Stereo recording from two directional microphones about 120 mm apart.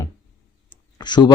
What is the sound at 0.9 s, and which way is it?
Speech, 40° left (ahead or behind).